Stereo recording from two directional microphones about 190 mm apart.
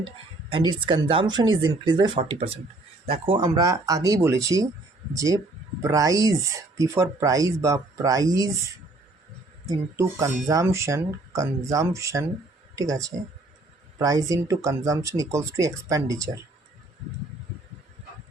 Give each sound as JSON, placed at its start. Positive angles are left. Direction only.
{"t": 0.5, "sound": "speech", "side_deg": -25}
{"t": 9.6, "sound": "speech", "side_deg": -15}